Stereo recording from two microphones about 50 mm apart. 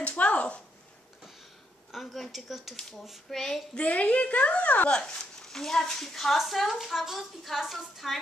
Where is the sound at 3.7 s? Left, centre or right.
Left.